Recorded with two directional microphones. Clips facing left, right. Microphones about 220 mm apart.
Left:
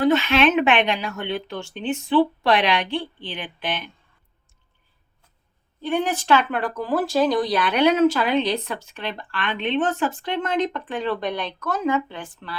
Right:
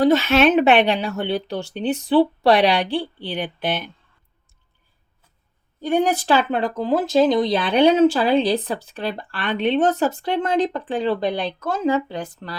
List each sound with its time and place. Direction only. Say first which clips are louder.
0.0 s speech: right 3 dB; 40° right (ahead or behind)
5.8 s speech: right 4 dB; 40° right (ahead or behind)
6.6 s speech: right 3 dB; 20° right (ahead or behind); by 12.5 s 40° right (ahead or behind)